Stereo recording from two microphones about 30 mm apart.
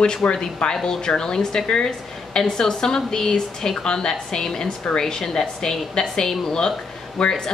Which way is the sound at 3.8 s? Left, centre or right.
Left.